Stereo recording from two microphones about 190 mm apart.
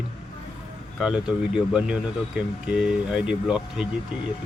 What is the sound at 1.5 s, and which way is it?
Speech, 5° right (ahead or behind).